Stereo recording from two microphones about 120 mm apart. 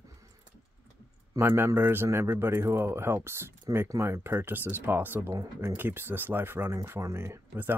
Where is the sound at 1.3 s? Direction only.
20° right (ahead or behind).